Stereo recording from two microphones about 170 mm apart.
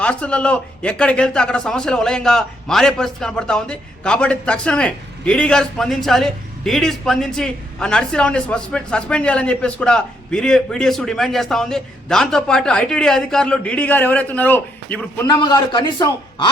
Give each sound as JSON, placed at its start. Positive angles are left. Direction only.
{"t": 0.0, "sound": "a man's voice", "side_deg": 5}
{"t": 15.2, "sound": "a man's voice", "side_deg": 25}